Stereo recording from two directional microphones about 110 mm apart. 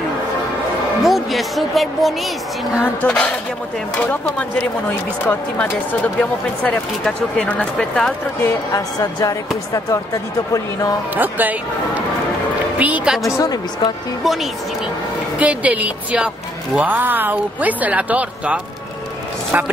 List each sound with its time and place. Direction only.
1.0 s a woman's voice: centre (ahead or behind)
8.7 s speech: 30° left (ahead or behind)
11.1 s speech: 15° right (ahead or behind)
13.4 s speech: 35° left (ahead or behind)
14.2 s a woman's voice: centre (ahead or behind)
15.3 s speech: 15° right (ahead or behind)